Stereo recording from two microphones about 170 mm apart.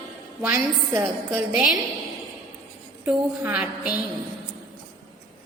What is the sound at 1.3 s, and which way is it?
Speech, centre (ahead or behind).